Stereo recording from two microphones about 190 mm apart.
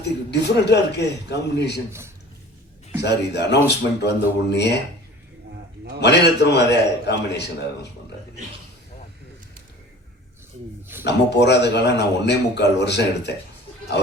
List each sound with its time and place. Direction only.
0.3 s speech: 65° left (ahead or behind)
1.9 s a man's voice: 15° right (ahead or behind)
3.0 s speech: 65° left (ahead or behind)
6.0 s speech: 65° left (ahead or behind)
11.0 s speech: 60° left (ahead or behind)